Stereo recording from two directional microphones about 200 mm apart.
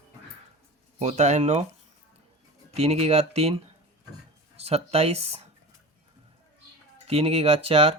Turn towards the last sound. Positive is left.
turn(degrees=-30)  # may be behind; listen again after turning